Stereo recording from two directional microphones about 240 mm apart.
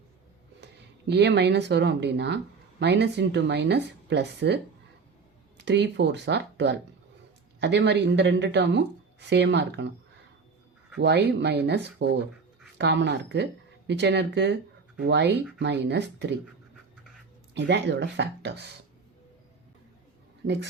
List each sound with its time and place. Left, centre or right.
1.0 s speech: right
5.6 s speech: right
11.0 s speech: right
17.5 s speech: right